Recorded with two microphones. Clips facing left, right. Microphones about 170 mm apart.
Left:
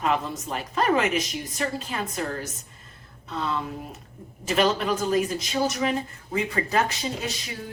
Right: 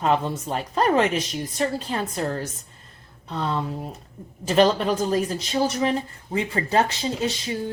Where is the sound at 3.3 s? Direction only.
35° right (ahead or behind).